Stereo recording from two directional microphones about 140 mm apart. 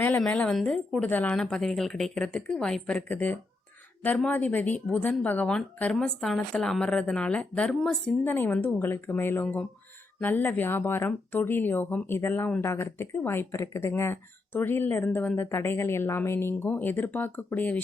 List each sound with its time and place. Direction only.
0.0 s a woman's voice: 10° left (ahead or behind)